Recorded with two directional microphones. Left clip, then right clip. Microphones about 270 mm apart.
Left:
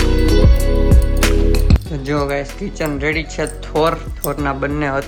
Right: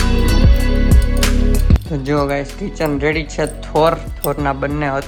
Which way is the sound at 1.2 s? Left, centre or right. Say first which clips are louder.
Left 3 dB; centre.